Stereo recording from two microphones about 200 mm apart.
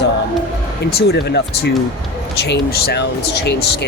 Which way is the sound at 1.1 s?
55° left (ahead or behind).